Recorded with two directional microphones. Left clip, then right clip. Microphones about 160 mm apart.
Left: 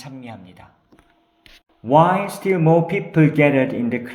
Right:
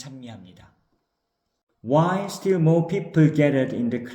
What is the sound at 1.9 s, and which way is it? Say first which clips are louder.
A man's voice: left 7 dB; 20° right (ahead or behind).